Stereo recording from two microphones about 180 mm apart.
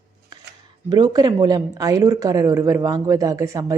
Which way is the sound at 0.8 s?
25° right (ahead or behind).